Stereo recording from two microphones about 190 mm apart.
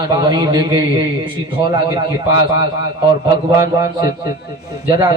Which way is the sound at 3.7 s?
20° right (ahead or behind).